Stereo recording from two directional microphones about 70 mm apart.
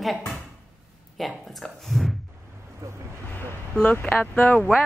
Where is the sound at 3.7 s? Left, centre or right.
Centre.